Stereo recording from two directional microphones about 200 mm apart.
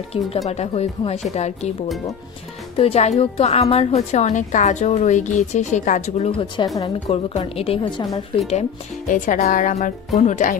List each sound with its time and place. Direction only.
0.5 s a woman's voice: 30° left (ahead or behind)
2.8 s a woman's voice: 30° left (ahead or behind)
9.1 s a woman's voice: 40° left (ahead or behind)